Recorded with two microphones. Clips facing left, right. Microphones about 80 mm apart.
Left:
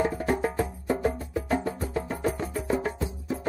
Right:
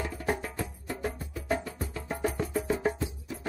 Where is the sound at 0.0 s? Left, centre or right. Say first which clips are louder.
Left 7 dB; left.